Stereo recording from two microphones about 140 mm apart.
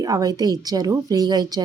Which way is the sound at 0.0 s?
25° right (ahead or behind).